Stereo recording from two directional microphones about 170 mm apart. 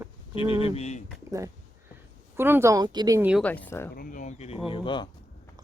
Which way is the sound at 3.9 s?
55° left (ahead or behind).